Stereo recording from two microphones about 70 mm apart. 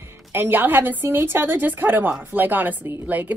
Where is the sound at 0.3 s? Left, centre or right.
Right.